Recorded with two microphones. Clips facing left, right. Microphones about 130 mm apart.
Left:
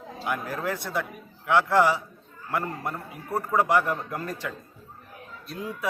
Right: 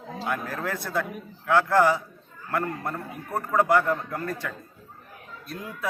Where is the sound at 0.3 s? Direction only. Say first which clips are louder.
Left 1 dB; 15° left (ahead or behind).